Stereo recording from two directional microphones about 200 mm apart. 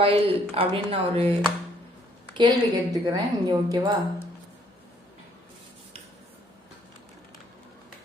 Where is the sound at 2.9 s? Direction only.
20° right (ahead or behind).